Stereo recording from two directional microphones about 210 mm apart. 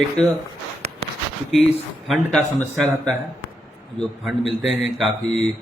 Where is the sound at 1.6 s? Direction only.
Centre (ahead or behind).